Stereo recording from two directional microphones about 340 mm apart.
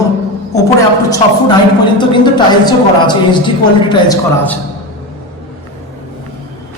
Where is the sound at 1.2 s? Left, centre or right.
Centre.